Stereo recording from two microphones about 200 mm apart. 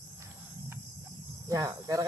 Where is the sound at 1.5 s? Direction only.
15° right (ahead or behind).